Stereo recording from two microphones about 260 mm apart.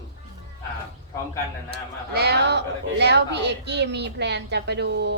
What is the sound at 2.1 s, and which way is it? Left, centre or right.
A woman's voice, right.